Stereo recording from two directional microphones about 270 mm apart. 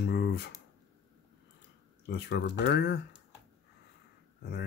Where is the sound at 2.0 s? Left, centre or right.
Left.